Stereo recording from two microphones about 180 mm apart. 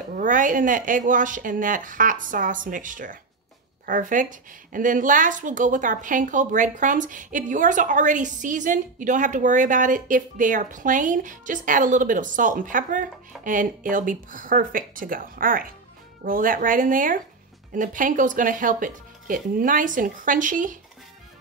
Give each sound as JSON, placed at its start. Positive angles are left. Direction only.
{"t": 0.1, "sound": "a woman's voice", "side_deg": -45}